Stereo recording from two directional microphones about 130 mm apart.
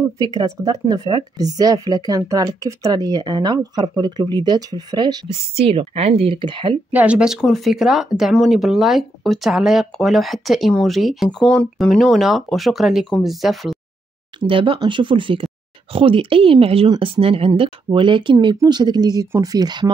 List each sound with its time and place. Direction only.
0.2 s speech: 30° right (ahead or behind)
5.3 s speech: 50° right (ahead or behind)
6.9 s speech: 10° right (ahead or behind)
14.4 s speech: 40° right (ahead or behind)